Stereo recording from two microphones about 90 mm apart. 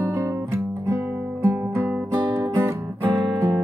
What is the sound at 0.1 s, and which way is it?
Guitar, 30° right (ahead or behind).